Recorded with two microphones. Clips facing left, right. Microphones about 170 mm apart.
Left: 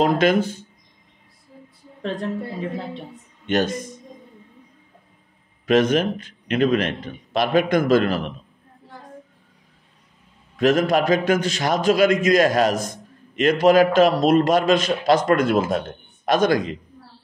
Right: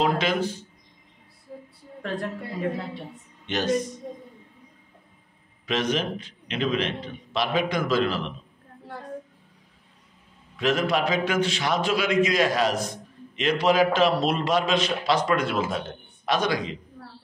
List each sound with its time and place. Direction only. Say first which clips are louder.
0.0 s a man's voice: left 6 dB; 50° left (ahead or behind)
3.4 s a man's voice: left 3 dB; 50° left (ahead or behind)
5.7 s a man's voice: left 8 dB; 50° left (ahead or behind)
10.5 s a man's voice: left 6 dB; 45° left (ahead or behind)
17.0 s a sound: right 3 dB; 80° right